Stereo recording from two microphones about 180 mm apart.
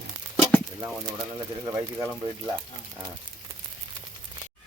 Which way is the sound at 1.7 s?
10° right (ahead or behind).